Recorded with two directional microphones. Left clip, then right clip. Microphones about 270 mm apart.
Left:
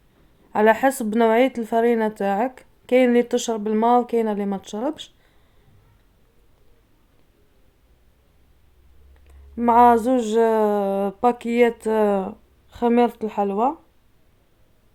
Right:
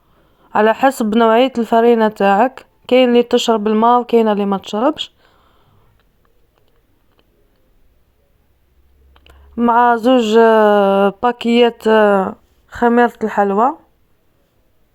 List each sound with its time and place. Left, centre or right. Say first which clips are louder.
0.5 s speech: right 5 dB; centre
9.2 s speech: right 5 dB; centre